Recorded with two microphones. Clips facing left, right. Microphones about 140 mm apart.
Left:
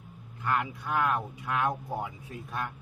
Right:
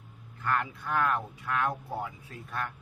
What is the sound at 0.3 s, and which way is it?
Speech, 10° left (ahead or behind).